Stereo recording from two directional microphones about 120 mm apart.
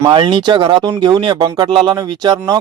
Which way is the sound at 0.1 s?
45° right (ahead or behind).